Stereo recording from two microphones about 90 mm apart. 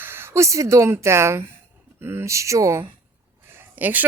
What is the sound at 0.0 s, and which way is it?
Speech, 25° right (ahead or behind).